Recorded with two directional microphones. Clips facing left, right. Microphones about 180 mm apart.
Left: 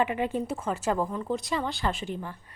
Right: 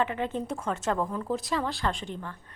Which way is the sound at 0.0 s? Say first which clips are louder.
Left 2 dB; 10° left (ahead or behind).